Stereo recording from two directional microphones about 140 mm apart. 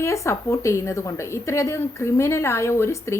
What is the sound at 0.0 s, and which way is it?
A woman's voice, 20° left (ahead or behind).